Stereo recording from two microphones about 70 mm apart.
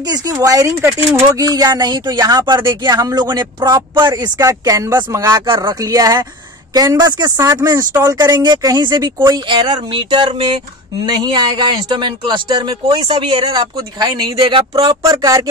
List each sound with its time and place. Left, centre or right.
0.3 s speech: right
4.4 s speech: right